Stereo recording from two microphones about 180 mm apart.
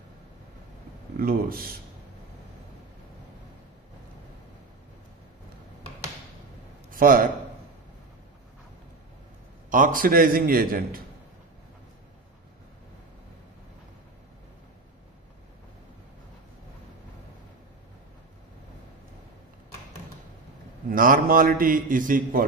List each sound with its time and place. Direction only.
1.1 s speech: 55° right (ahead or behind)
6.9 s a man's voice: 50° right (ahead or behind)
9.7 s a man's voice: 50° right (ahead or behind)
20.9 s a man's voice: 50° right (ahead or behind)